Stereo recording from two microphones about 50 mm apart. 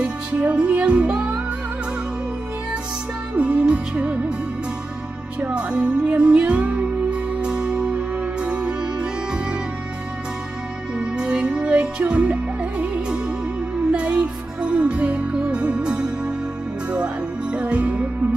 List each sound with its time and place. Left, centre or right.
0.0 s music: right
3.3 s music: right
5.4 s music: centre
11.0 s music: centre